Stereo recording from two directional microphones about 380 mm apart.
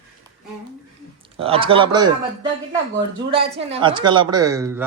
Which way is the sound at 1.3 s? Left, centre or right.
Centre.